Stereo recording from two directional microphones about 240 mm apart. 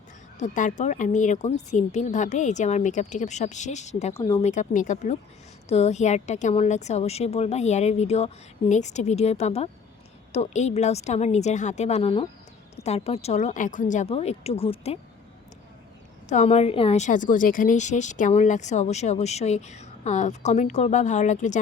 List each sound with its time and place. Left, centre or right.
0.3 s a woman's voice: left
4.1 s speech: centre
4.4 s a woman's voice: left
16.3 s a woman's voice: left